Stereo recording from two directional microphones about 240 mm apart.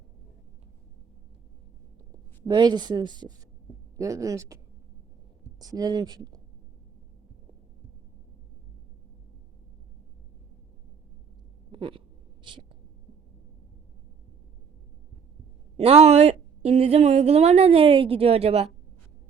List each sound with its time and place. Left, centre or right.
2.5 s speech: centre
11.7 s a sound: right
15.8 s a woman's voice: right